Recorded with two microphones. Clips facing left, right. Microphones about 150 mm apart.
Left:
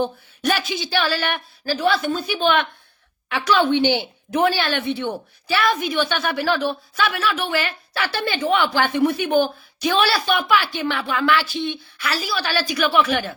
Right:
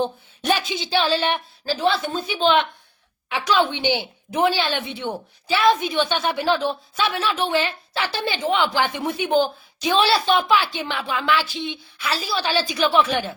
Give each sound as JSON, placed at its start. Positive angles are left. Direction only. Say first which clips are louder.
{"t": 0.0, "sound": "a woman's voice", "louder": "left 2 dB", "side_deg": -25}